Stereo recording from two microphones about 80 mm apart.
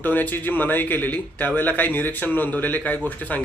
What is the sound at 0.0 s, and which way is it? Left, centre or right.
Speech, left.